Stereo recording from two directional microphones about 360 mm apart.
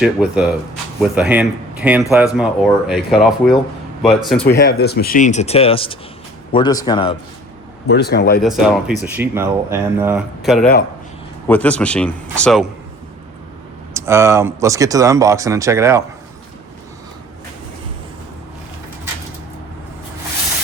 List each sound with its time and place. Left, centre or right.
0.0 s speech: centre
4.4 s a man's voice: left
7.9 s speech: left
8.4 s speech: centre
13.9 s speech: centre